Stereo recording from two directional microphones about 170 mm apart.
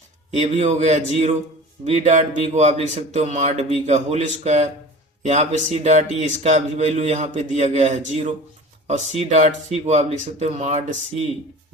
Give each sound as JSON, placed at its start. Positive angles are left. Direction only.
{"t": 0.3, "sound": "speech", "side_deg": -40}